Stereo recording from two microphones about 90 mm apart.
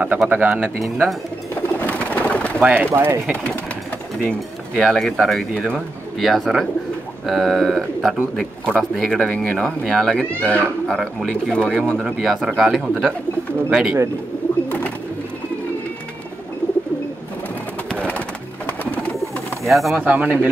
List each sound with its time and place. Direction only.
0.3 s speech: 20° right (ahead or behind)
0.7 s speech: centre (ahead or behind)
1.5 s bird: 20° left (ahead or behind)
2.6 s speech: 20° right (ahead or behind)
4.2 s speech: 10° left (ahead or behind)
12.0 s speech: centre (ahead or behind)
17.8 s bird: 15° left (ahead or behind)
19.6 s speech: centre (ahead or behind)
20.0 s speech: 20° right (ahead or behind)